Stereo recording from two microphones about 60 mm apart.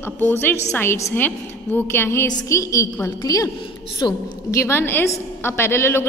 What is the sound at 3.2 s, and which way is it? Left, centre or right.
Speech, left.